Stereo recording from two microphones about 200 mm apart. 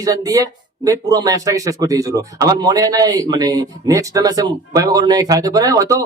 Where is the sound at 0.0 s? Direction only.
15° right (ahead or behind).